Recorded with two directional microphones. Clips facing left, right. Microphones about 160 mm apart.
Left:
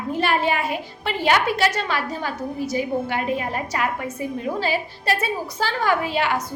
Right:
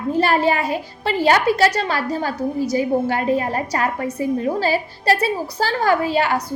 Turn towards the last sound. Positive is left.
turn(degrees=-40)  # may be behind; listen again after turning